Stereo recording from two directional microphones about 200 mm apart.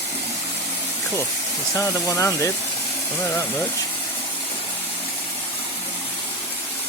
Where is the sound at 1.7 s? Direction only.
15° left (ahead or behind).